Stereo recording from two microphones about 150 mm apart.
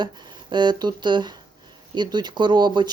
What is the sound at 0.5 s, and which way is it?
Speech, 30° right (ahead or behind).